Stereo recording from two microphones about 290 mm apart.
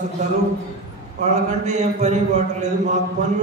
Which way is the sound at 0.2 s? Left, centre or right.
Right.